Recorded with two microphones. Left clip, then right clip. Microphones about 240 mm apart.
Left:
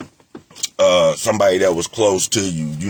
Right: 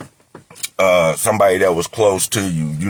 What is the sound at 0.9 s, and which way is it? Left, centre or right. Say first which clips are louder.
Speech: right 2 dB; centre.